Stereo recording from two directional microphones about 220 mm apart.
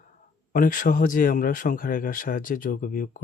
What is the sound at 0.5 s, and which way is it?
Speech, 40° left (ahead or behind).